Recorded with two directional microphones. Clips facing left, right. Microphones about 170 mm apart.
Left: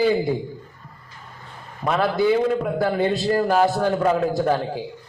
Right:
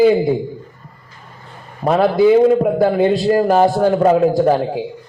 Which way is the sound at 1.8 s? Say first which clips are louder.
Right 7 dB; 35° right (ahead or behind).